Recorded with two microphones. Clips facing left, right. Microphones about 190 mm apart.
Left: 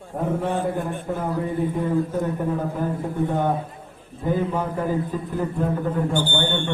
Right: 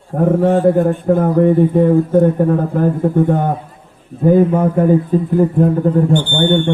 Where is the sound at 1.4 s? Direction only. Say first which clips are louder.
Right 14 dB; 70° right (ahead or behind); by 5.7 s 50° right (ahead or behind).